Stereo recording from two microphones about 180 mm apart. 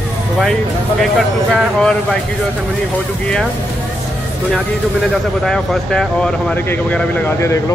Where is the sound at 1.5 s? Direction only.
5° left (ahead or behind).